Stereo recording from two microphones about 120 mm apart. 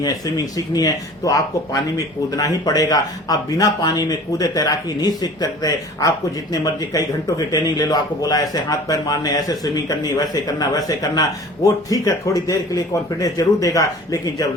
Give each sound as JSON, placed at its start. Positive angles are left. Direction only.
{"t": 0.0, "sound": "speech", "side_deg": 30}